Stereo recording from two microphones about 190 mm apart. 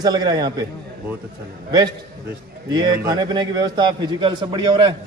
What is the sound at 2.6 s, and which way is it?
A man's voice, 20° right (ahead or behind).